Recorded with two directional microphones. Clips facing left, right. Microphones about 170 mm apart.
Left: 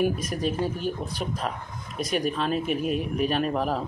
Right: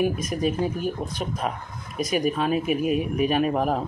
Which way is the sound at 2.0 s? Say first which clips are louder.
Right 3 dB; 5° right (ahead or behind).